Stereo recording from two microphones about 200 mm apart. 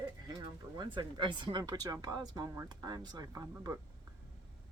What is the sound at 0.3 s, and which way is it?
Speech, 20° right (ahead or behind).